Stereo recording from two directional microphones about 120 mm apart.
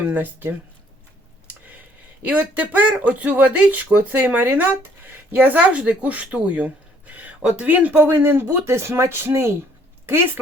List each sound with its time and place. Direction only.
0.1 s speech: 15° right (ahead or behind)
1.5 s a sound: 15° right (ahead or behind)
2.2 s speech: 15° right (ahead or behind)